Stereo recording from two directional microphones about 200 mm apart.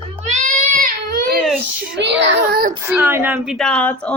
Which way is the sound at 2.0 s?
60° right (ahead or behind).